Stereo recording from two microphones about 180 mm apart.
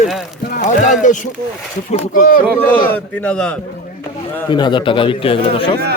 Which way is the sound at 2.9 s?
10° left (ahead or behind).